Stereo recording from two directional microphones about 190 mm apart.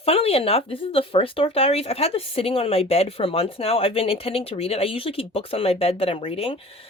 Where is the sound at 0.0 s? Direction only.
30° left (ahead or behind).